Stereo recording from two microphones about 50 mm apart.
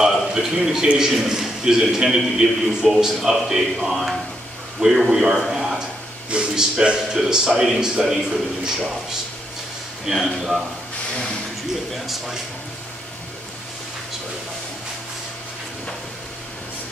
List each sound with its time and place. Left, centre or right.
0.3 s a man's voice: centre
6.3 s a man's voice: centre
10.0 s speech: centre
11.9 s speech: centre